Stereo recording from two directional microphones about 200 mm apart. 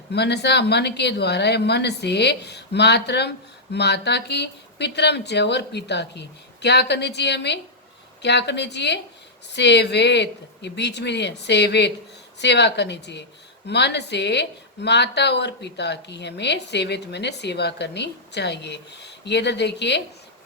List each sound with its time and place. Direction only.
0.1 s speech: 55° left (ahead or behind)